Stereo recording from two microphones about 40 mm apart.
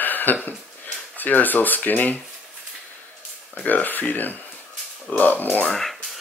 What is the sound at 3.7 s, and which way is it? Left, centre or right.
Speech, left.